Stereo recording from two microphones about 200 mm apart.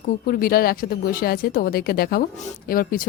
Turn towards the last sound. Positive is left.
turn(degrees=45)  # may be behind; listen again after turning